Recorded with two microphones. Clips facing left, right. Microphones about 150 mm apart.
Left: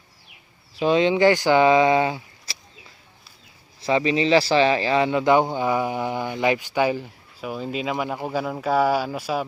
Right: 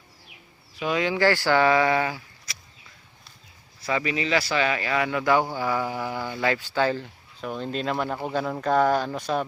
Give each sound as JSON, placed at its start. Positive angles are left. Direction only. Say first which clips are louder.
{"t": 0.8, "sound": "speech", "louder": "left 6 dB", "side_deg": 25}
{"t": 3.8, "sound": "speech", "louder": "left 6 dB", "side_deg": 25}